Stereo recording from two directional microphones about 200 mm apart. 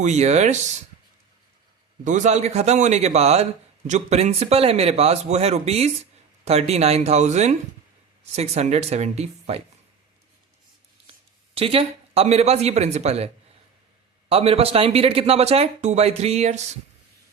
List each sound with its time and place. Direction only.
0.0 s speech: 35° right (ahead or behind)
2.0 s speech: 35° right (ahead or behind)
11.5 s speech: 30° right (ahead or behind)